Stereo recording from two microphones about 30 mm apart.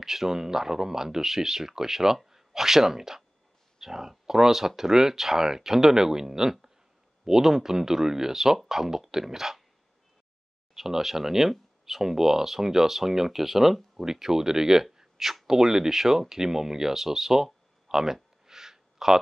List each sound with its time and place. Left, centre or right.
0.0 s speech: centre
10.7 s speech: centre
17.8 s a sound: centre